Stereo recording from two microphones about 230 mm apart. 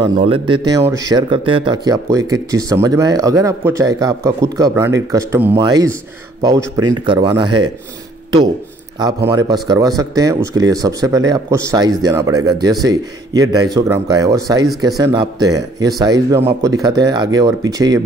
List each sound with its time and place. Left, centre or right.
0.0 s speech: right
9.0 s speech: centre